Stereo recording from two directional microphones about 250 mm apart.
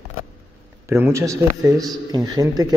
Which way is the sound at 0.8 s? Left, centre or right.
Centre.